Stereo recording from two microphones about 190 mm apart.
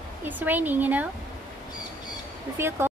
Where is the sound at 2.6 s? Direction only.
10° right (ahead or behind).